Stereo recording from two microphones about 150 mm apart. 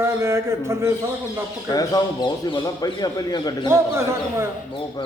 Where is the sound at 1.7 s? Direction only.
25° left (ahead or behind).